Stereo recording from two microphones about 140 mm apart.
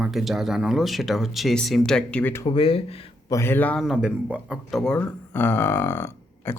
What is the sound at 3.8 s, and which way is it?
Speech, 5° right (ahead or behind).